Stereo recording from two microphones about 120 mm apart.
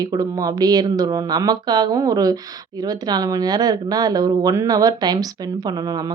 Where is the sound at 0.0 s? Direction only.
30° right (ahead or behind).